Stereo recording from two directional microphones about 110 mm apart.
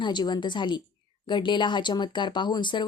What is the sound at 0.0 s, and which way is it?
Speech, 40° left (ahead or behind).